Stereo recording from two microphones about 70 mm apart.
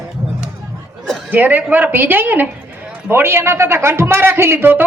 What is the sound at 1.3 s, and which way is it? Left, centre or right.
A woman's voice, right.